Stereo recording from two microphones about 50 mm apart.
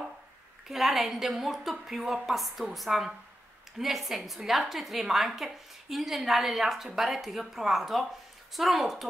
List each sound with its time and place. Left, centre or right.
0.7 s a woman's voice: centre